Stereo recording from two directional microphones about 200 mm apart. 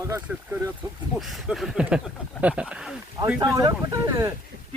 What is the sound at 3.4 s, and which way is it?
Speech, 20° right (ahead or behind).